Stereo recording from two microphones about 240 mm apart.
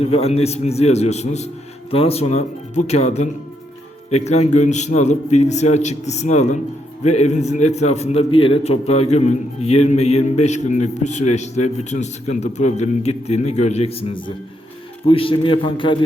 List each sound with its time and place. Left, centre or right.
0.0 s a man's voice: left